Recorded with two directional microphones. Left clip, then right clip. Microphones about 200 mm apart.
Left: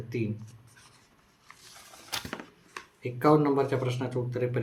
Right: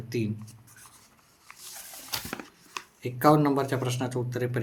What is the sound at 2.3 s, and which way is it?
Speech, 15° right (ahead or behind).